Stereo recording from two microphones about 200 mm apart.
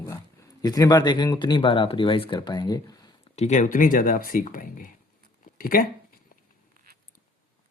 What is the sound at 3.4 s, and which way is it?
Speech, 35° left (ahead or behind).